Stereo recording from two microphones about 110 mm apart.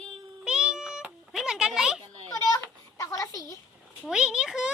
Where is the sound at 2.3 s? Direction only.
30° left (ahead or behind).